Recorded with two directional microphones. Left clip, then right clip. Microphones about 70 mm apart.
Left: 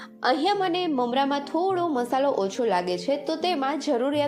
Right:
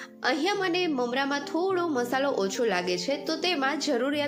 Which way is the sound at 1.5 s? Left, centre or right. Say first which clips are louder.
Left 3 dB; left.